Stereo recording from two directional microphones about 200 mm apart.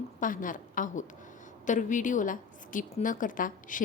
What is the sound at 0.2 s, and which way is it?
A woman's voice, 40° left (ahead or behind).